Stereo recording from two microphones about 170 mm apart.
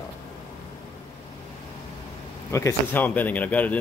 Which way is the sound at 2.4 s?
15° left (ahead or behind).